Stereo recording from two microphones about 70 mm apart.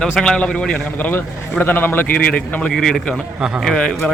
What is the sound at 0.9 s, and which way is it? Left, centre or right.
Speech, left.